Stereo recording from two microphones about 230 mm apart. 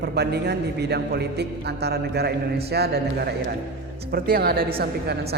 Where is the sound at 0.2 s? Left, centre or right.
Right.